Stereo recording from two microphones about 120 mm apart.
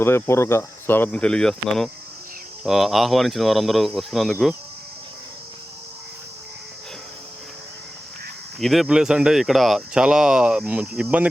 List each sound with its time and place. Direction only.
0.0 s speech: 20° left (ahead or behind); by 4.5 s centre (ahead or behind)
8.5 s speech: centre (ahead or behind)